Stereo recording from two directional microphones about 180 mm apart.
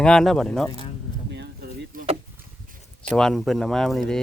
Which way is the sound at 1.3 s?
70° right (ahead or behind).